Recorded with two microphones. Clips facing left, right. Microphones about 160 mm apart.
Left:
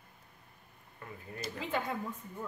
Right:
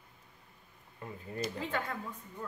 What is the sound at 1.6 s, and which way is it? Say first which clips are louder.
Speech: left 1 dB; 15° left (ahead or behind).